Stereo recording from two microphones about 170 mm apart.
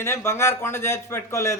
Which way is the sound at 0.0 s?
15° left (ahead or behind).